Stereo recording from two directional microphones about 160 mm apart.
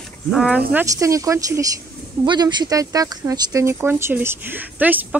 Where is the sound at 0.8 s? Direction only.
20° right (ahead or behind).